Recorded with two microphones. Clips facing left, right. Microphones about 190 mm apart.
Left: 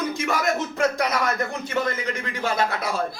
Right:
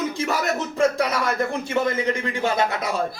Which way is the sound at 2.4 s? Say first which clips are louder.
Right 1 dB; 20° right (ahead or behind).